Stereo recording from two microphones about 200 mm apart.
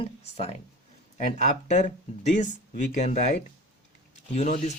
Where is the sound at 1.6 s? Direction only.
35° left (ahead or behind).